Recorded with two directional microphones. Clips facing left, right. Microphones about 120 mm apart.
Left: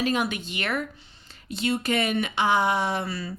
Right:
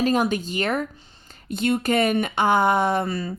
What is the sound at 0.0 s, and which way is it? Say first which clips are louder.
Speech: right 5 dB; 40° right (ahead or behind).